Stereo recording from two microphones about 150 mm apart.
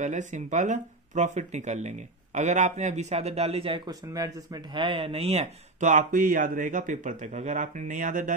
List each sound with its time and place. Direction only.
0.0 s speech: 55° right (ahead or behind)
3.8 s speech: 25° right (ahead or behind)
4.7 s speech: 35° right (ahead or behind)
5.9 s speech: 60° right (ahead or behind)